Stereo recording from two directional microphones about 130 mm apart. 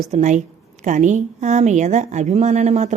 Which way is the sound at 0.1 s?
65° right (ahead or behind).